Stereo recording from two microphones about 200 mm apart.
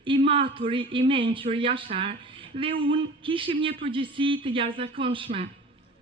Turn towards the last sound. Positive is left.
turn(degrees=-25)  # may be behind; listen again after turning